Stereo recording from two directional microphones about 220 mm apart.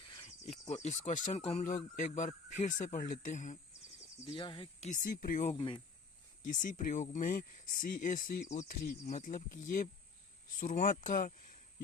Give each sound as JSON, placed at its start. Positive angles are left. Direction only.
{"t": 0.3, "sound": "speech", "side_deg": 30}
{"t": 4.3, "sound": "speech", "side_deg": 20}
{"t": 5.5, "sound": "speech", "side_deg": 20}
{"t": 6.4, "sound": "speech", "side_deg": 35}